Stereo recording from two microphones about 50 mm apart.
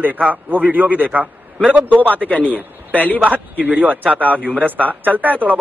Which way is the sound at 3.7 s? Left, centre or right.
Right.